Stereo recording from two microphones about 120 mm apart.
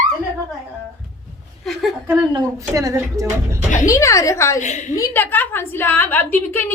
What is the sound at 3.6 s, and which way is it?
Speech, 90° left.